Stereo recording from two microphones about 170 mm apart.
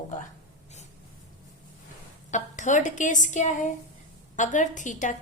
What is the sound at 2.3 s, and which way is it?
A woman's voice, 45° left (ahead or behind).